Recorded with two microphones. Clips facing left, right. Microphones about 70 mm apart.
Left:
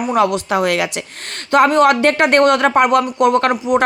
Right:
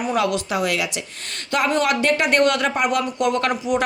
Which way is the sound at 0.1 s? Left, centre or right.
Left.